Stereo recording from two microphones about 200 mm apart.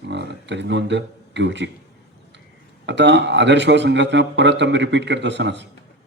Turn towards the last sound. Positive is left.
turn(degrees=-60)  # may be behind; listen again after turning